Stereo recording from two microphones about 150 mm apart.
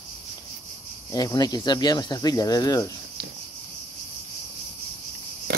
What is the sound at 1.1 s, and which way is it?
Speech, 25° left (ahead or behind).